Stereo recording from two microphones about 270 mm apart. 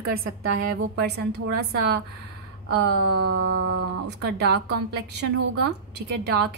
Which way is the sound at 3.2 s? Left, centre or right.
Right.